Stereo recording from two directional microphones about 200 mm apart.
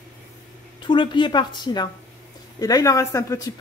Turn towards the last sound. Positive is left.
turn(degrees=15)  # may be behind; listen again after turning